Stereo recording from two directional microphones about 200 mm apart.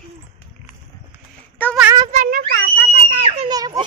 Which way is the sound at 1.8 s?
15° right (ahead or behind).